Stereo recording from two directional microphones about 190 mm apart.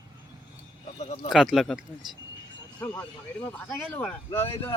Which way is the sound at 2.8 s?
10° left (ahead or behind).